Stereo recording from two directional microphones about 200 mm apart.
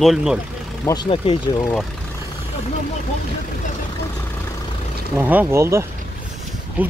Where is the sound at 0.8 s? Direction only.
20° left (ahead or behind).